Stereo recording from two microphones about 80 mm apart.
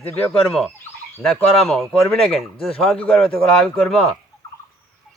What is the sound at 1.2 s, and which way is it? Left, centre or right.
Speech, centre.